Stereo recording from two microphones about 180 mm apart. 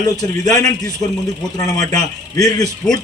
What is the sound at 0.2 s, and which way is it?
A man's voice, 20° left (ahead or behind).